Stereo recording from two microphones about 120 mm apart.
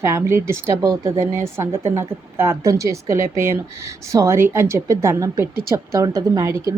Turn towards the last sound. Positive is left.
turn(degrees=-30)  # may be behind; listen again after turning